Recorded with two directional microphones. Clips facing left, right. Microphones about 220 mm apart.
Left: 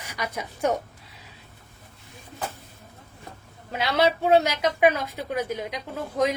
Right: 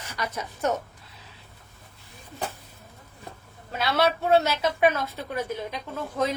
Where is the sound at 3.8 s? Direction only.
15° left (ahead or behind).